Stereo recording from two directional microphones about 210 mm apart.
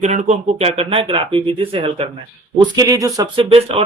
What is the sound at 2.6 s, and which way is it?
Speech, 15° right (ahead or behind).